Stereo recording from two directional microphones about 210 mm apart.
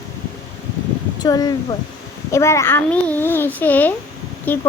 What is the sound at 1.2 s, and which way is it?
Speech, 20° left (ahead or behind).